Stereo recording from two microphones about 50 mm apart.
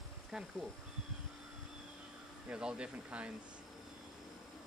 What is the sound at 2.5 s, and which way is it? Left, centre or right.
Speech, centre.